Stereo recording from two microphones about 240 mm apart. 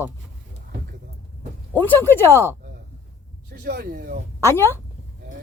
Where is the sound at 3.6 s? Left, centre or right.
Right.